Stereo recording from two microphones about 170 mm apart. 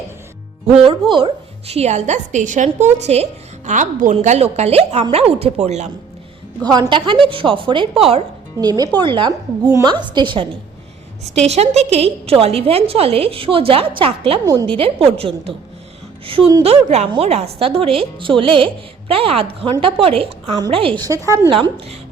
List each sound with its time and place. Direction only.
0.8 s a woman's voice: 30° right (ahead or behind)
6.7 s a woman's voice: 25° right (ahead or behind)
8.6 s a woman's voice: 25° right (ahead or behind)
14.4 s a woman's voice: 20° right (ahead or behind)
14.8 s a woman's voice: 35° right (ahead or behind); by 21.5 s 20° right (ahead or behind)
21.5 s a woman's voice: 30° right (ahead or behind)